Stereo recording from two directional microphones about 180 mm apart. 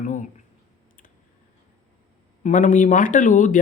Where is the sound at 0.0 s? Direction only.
45° left (ahead or behind).